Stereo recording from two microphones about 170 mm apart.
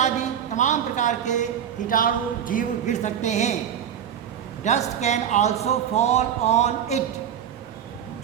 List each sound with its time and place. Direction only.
0.5 s speech: 45° left (ahead or behind)
4.6 s a man's voice: 45° left (ahead or behind)